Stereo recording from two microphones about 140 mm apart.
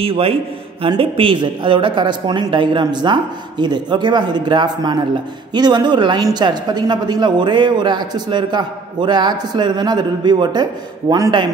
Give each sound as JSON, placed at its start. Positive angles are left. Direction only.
{"t": 0.0, "sound": "a man's voice", "side_deg": -40}